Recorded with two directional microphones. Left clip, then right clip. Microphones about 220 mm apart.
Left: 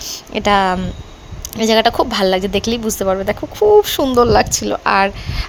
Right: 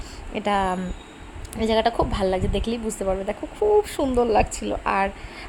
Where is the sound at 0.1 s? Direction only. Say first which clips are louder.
Left 9 dB; 20° left (ahead or behind).